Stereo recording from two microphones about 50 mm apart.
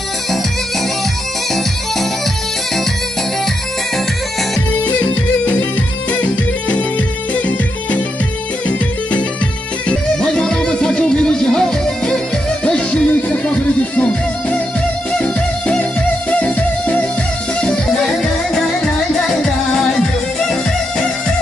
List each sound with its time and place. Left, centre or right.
4.8 s music: left
7.3 s music: left
9.8 s music: left
15.1 s music: centre
19.7 s music: centre